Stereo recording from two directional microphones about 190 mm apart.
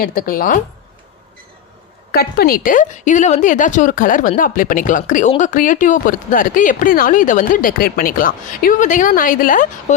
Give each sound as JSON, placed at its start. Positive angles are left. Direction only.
{"t": 0.0, "sound": "speech", "side_deg": 50}
{"t": 2.1, "sound": "speech", "side_deg": 55}